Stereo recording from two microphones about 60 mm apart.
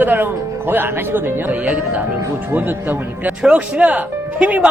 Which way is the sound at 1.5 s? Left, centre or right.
Right.